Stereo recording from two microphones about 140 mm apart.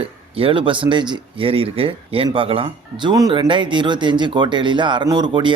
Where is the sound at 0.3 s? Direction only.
40° right (ahead or behind).